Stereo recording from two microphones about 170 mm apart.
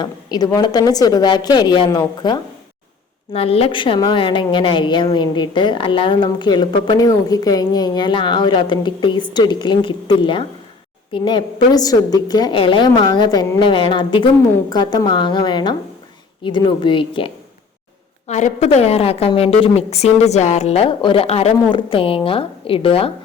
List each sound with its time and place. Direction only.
0.0 s a woman's voice: 25° left (ahead or behind)
3.3 s a woman's voice: 35° left (ahead or behind)
18.3 s a woman's voice: 45° left (ahead or behind)